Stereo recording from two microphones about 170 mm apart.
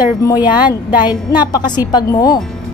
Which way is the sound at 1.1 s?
25° left (ahead or behind).